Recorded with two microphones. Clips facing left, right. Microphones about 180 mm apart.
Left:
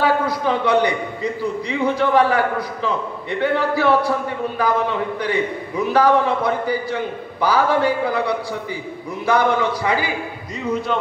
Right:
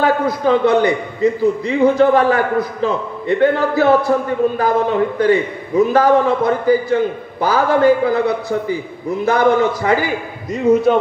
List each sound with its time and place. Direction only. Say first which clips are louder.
0.0 s a man's voice: right 3 dB; 50° right (ahead or behind)